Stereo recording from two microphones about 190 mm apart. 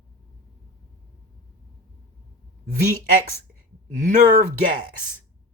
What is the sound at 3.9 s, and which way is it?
Speech, 40° right (ahead or behind).